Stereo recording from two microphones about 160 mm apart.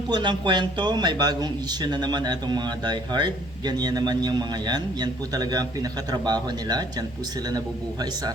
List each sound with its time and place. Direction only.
0.1 s a man's voice: 30° right (ahead or behind)